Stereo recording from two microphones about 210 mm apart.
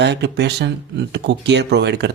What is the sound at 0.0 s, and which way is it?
Speech, 55° right (ahead or behind).